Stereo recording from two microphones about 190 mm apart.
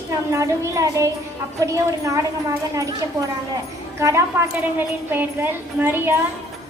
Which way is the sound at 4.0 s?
15° right (ahead or behind).